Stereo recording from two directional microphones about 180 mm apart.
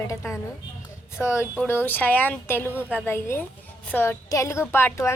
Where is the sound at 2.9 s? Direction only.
15° left (ahead or behind).